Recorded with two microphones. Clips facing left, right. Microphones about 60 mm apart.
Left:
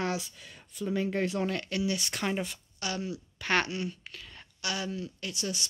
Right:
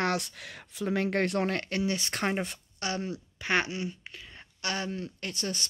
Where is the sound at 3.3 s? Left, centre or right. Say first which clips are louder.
Even; centre.